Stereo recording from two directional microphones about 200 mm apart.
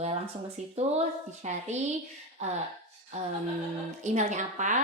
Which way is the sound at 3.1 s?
35° right (ahead or behind).